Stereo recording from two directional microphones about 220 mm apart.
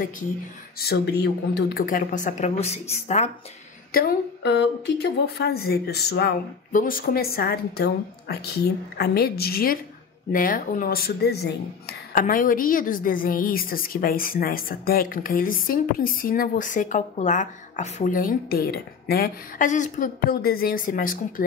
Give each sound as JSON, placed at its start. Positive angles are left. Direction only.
{"t": 0.7, "sound": "a woman's voice", "side_deg": 45}
{"t": 3.9, "sound": "a woman's voice", "side_deg": 45}